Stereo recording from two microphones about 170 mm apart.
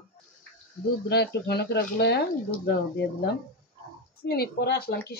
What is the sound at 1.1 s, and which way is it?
Speech, 75° left (ahead or behind).